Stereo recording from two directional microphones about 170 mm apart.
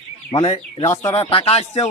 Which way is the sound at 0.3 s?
35° left (ahead or behind).